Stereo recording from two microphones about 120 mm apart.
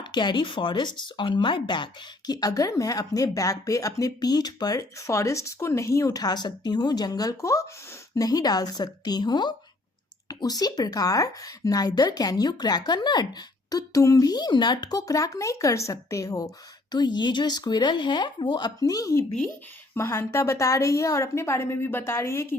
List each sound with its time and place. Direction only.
0.0 s speech: 40° left (ahead or behind); by 22.5 s 20° left (ahead or behind)